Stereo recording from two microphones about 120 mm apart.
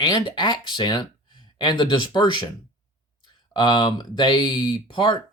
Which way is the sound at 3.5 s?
35° left (ahead or behind).